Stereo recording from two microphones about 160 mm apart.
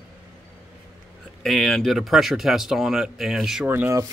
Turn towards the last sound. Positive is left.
turn(degrees=-15)  # may be behind; listen again after turning